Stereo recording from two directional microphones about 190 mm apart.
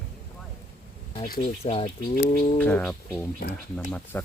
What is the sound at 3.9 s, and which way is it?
Speech, 5° left (ahead or behind).